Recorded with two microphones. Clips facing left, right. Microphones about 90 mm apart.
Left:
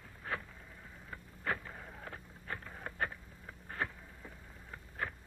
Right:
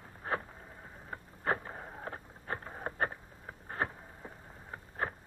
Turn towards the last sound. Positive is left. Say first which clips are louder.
# right 4 dB
turn(degrees=-35)  # may be behind; listen again after turning